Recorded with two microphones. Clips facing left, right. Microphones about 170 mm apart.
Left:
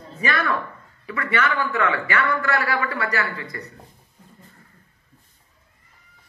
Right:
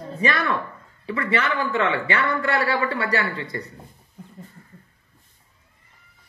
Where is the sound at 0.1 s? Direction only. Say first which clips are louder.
Right 1 dB; 30° right (ahead or behind).